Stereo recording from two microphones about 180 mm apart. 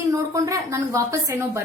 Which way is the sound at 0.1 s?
20° right (ahead or behind).